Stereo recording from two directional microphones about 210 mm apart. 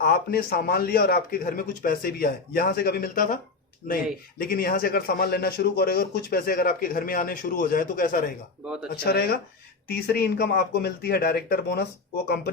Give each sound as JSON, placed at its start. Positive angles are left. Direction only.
{"t": 0.0, "sound": "a man's voice", "side_deg": 45}
{"t": 8.6, "sound": "speech", "side_deg": -5}
{"t": 9.0, "sound": "a man's voice", "side_deg": 50}